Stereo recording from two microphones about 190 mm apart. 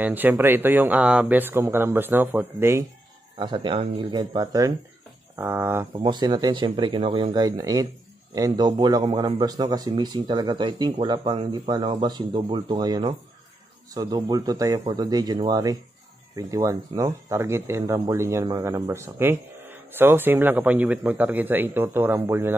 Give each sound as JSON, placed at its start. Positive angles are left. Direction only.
{"t": 0.0, "sound": "speech", "side_deg": -10}
{"t": 3.3, "sound": "a man's voice", "side_deg": -25}